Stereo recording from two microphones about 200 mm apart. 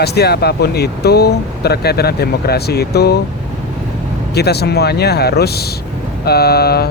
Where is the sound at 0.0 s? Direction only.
55° left (ahead or behind).